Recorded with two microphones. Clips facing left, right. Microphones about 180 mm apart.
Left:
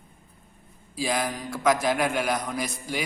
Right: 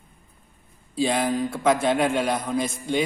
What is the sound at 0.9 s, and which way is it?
A man's voice, 30° right (ahead or behind).